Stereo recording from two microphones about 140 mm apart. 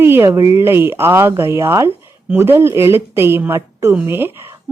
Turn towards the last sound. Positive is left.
turn(degrees=-15)  # may be behind; listen again after turning